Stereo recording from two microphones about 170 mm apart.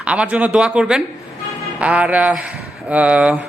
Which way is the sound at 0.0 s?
5° right (ahead or behind).